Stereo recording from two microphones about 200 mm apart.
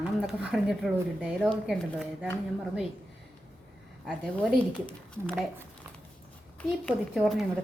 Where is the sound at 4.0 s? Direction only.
Centre (ahead or behind).